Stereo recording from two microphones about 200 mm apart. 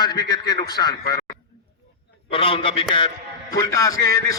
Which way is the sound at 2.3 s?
25° left (ahead or behind).